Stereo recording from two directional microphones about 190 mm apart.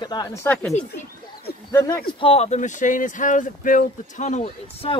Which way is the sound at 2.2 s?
30° left (ahead or behind).